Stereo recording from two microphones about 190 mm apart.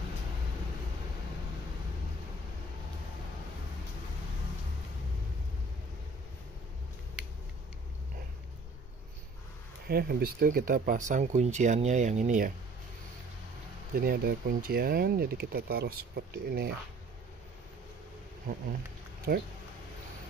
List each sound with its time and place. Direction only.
9.8 s speech: 55° right (ahead or behind)
13.9 s speech: 55° right (ahead or behind)
19.3 s speech: 50° right (ahead or behind)